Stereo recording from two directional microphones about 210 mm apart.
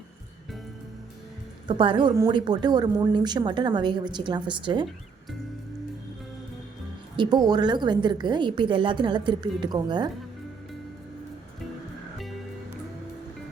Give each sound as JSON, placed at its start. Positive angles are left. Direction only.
{"t": 1.6, "sound": "a woman's voice", "side_deg": -25}
{"t": 7.2, "sound": "a woman's voice", "side_deg": -20}